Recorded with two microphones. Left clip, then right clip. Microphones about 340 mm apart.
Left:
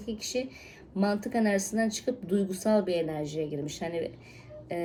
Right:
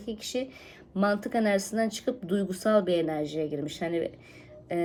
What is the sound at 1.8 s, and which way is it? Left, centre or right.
Speech, right.